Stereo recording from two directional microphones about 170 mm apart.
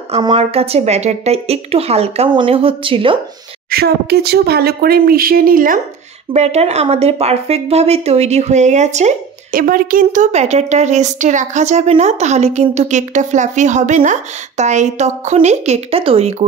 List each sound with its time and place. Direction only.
0.2 s a woman's voice: 30° right (ahead or behind)
3.7 s speech: 70° right (ahead or behind)
6.3 s a woman's voice: 40° right (ahead or behind)